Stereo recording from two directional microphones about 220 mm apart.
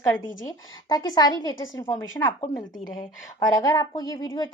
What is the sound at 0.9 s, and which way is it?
Speech, 20° left (ahead or behind).